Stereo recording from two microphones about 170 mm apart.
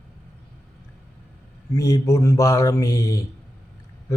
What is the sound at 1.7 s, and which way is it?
Mantra, 15° left (ahead or behind).